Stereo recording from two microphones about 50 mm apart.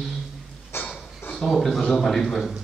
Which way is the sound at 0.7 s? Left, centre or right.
Left.